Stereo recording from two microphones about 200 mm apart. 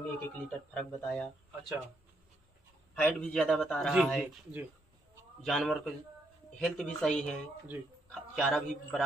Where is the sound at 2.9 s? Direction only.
5° left (ahead or behind).